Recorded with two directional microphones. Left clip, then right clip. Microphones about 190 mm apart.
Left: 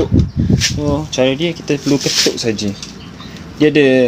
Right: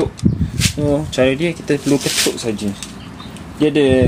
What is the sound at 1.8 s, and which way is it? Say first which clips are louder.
Speech: left 4 dB; 20° left (ahead or behind).